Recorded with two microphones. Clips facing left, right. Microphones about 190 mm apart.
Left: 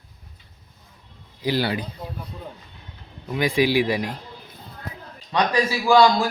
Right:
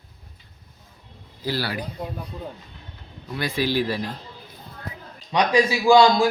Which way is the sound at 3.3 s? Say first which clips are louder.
Left 4 dB; 15° left (ahead or behind).